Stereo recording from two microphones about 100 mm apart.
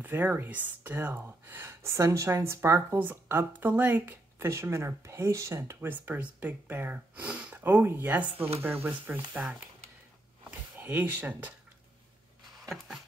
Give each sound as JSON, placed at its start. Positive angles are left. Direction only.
{"t": 0.0, "sound": "speech", "side_deg": -20}
{"t": 10.8, "sound": "speech", "side_deg": -20}
{"t": 12.6, "sound": "a sound", "side_deg": -5}